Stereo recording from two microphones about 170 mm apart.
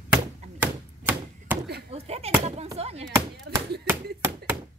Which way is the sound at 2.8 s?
35° right (ahead or behind).